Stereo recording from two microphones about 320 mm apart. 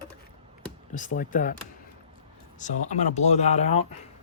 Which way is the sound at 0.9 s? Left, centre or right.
Left.